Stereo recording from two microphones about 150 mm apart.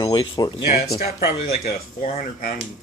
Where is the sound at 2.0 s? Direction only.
65° left (ahead or behind).